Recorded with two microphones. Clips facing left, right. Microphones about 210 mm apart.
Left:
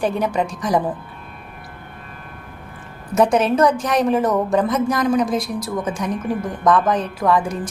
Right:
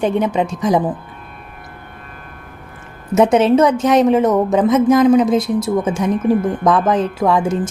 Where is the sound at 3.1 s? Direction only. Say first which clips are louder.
Right 5 dB; 25° right (ahead or behind).